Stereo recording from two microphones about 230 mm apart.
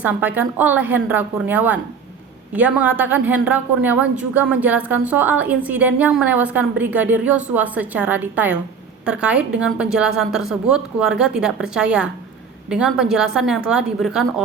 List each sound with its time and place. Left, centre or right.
0.0 s a woman's voice: centre